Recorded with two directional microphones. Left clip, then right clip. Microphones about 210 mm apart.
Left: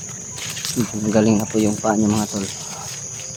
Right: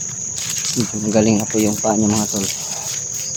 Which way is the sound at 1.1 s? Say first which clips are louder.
Right 1 dB; 10° right (ahead or behind).